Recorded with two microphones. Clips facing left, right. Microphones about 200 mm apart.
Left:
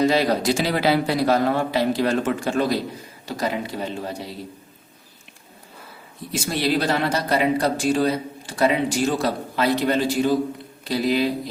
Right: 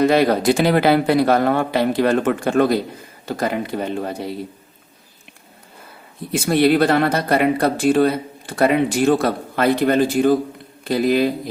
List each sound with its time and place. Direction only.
0.0 s speech: 55° right (ahead or behind)
6.3 s speech: 55° right (ahead or behind)